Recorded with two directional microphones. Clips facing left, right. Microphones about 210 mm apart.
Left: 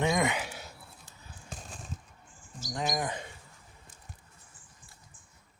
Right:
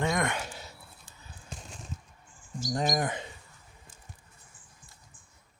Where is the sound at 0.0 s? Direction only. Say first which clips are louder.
Left 1 dB; 10° left (ahead or behind).